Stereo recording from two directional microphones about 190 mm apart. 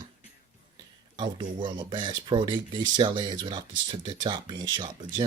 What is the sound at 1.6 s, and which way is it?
Speech, 25° right (ahead or behind).